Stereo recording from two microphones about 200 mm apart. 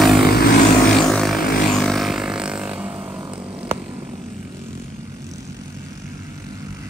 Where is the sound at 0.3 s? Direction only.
50° left (ahead or behind).